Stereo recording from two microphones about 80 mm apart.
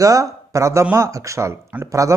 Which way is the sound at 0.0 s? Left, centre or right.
Right.